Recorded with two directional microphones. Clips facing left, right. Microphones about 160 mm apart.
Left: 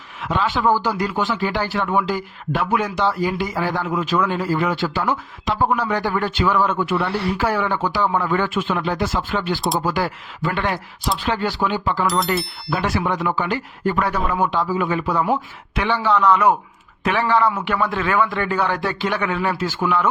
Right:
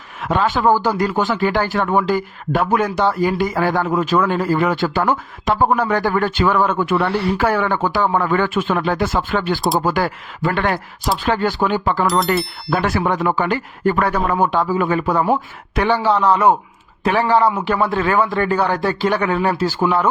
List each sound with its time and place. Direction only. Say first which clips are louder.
0.2 s a man's voice: right 3 dB; 50° right (ahead or behind)
12.2 s speech: right 3 dB; centre (ahead or behind)
12.7 s a man's voice: right 3 dB; 55° right (ahead or behind); by 20.1 s 35° right (ahead or behind)